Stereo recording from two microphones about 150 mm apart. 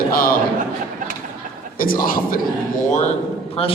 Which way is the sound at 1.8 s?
70° left (ahead or behind).